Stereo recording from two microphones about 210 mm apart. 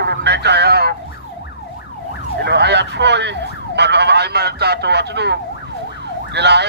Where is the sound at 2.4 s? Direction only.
55° right (ahead or behind).